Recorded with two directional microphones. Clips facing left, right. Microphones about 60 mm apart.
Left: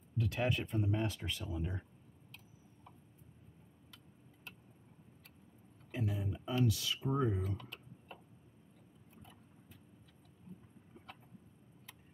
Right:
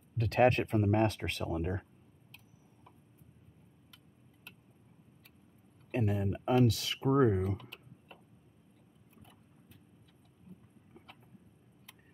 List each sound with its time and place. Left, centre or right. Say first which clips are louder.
0.2 s speech: right 9 dB; right
5.9 s speech: right 7 dB; right
7.4 s speech: right 6 dB; centre